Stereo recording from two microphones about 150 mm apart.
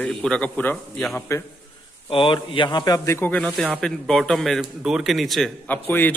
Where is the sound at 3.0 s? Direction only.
15° left (ahead or behind).